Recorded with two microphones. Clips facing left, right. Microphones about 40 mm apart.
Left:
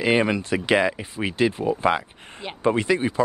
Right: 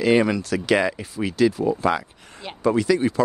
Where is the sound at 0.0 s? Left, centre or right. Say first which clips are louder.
Right 2 dB; left.